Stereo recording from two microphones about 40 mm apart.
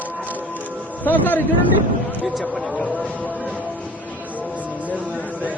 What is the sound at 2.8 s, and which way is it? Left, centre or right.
Speech, left.